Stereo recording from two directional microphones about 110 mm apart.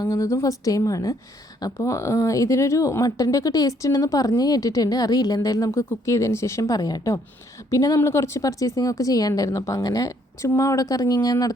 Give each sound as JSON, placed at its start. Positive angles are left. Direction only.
{"t": 0.0, "sound": "a woman's voice", "side_deg": 30}